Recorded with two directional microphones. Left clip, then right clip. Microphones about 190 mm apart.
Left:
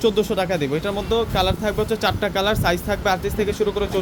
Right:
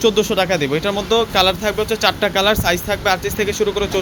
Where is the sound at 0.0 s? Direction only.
Centre (ahead or behind).